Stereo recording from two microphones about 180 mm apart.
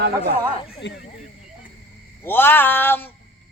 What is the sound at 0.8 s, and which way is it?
Speech, 75° left (ahead or behind).